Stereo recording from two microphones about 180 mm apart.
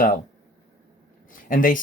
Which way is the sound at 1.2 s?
50° left (ahead or behind).